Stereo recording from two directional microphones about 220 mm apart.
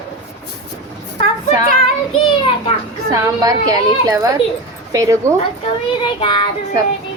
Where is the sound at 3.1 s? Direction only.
15° right (ahead or behind).